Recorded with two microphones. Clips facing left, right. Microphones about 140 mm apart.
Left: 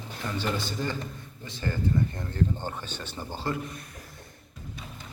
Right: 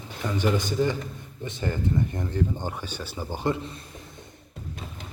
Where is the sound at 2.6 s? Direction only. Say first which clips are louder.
Right 2 dB; 10° right (ahead or behind).